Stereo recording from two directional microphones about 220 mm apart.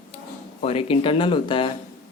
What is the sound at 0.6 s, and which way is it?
A man's voice, 25° left (ahead or behind).